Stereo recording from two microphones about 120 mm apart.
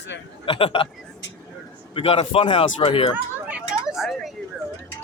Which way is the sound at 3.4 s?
5° right (ahead or behind).